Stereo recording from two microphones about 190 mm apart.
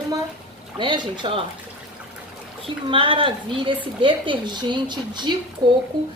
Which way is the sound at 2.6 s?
30° right (ahead or behind).